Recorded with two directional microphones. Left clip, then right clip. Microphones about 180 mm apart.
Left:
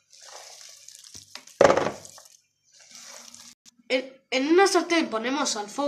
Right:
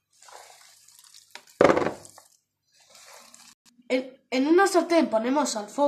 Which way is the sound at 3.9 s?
65° right (ahead or behind).